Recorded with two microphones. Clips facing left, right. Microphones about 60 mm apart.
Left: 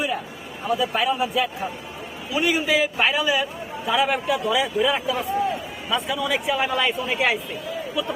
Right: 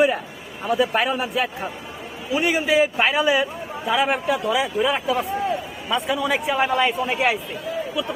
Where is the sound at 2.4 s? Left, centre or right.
Right.